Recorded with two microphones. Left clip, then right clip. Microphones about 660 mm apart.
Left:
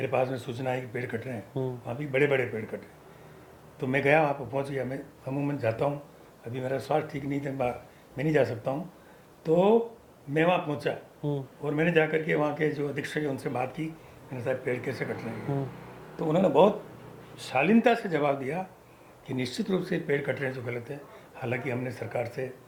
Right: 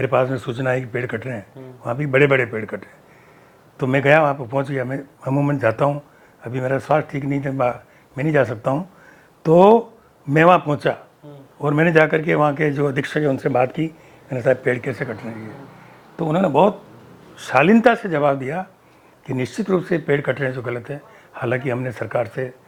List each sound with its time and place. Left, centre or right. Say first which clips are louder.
0.0 s speech: right 9 dB; right
9.4 s a man's voice: right 11 dB; right
16.2 s speech: right 6 dB; right